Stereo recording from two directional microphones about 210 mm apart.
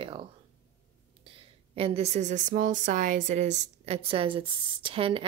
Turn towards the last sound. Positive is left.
turn(degrees=-25)  # may be behind; listen again after turning